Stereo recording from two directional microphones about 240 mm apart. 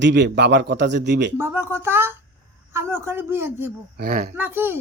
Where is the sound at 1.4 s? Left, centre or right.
Centre.